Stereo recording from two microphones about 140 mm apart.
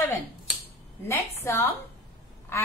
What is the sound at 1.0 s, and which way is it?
Speech, 20° left (ahead or behind).